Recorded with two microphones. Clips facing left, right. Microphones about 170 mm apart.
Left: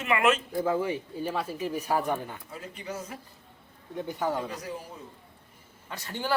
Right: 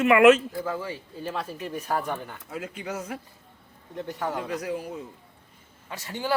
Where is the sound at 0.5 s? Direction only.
20° left (ahead or behind).